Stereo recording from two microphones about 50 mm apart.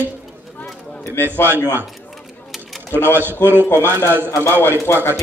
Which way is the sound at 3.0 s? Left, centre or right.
Right.